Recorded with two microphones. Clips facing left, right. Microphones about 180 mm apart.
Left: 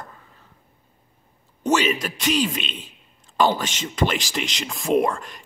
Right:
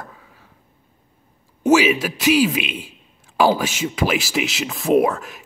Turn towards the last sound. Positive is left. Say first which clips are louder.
# right 4 dB
turn(degrees=-5)  # may be behind; listen again after turning